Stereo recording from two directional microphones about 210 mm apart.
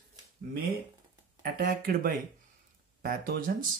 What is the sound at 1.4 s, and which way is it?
Speech, 45° right (ahead or behind).